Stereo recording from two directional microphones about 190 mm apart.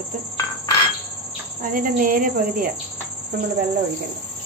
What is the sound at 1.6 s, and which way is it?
A woman's voice, 45° right (ahead or behind).